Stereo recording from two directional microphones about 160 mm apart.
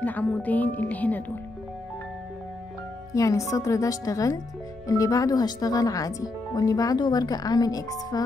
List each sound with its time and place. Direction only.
0.0 s speech: 10° left (ahead or behind)
3.2 s speech: 20° left (ahead or behind)